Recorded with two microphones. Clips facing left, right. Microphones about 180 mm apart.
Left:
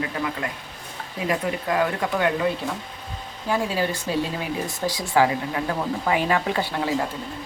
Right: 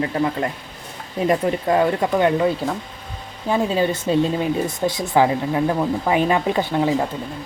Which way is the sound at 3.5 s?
20° right (ahead or behind).